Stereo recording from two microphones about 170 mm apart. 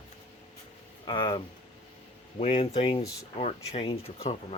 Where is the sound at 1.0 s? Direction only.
30° left (ahead or behind).